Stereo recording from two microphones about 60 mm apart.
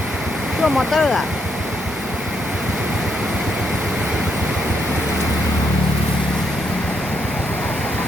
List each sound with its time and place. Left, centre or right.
0.6 s speech: centre